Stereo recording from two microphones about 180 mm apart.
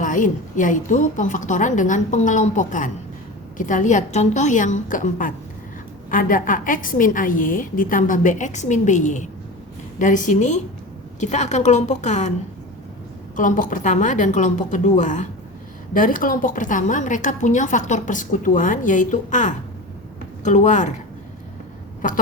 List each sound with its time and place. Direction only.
0.0 s a woman's voice: 45° left (ahead or behind)
13.3 s a woman's voice: 45° left (ahead or behind)
22.0 s a woman's voice: 50° left (ahead or behind)